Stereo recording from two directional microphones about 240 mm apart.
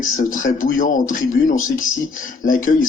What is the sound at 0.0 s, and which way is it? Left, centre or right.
Speech, left.